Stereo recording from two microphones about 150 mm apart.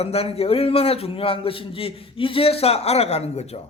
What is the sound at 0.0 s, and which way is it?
A man's voice, 40° left (ahead or behind).